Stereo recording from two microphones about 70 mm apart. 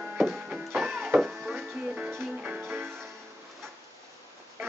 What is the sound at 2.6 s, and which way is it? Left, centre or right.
Music, right.